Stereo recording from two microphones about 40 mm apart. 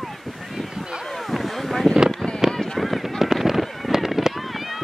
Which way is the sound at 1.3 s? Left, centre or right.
Centre.